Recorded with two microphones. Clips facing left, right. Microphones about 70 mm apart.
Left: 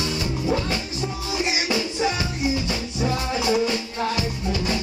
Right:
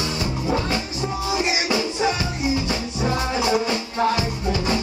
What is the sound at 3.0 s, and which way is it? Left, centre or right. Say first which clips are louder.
Music: right 1 dB; right.